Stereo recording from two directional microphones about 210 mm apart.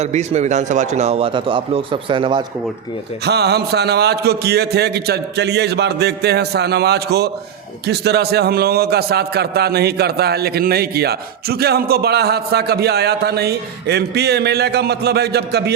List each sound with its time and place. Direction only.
0.0 s a man's voice: 30° right (ahead or behind)
3.2 s a man's voice: 50° right (ahead or behind)